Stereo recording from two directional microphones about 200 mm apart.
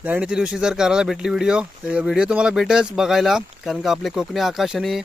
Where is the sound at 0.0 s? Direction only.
5° right (ahead or behind).